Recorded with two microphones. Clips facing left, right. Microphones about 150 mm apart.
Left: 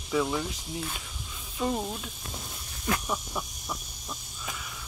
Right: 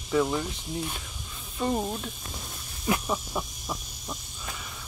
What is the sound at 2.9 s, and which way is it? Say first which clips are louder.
Speech: right 3 dB; 20° right (ahead or behind).